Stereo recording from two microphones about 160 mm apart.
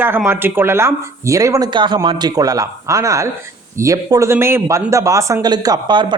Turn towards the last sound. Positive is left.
turn(degrees=-25)  # may be behind; listen again after turning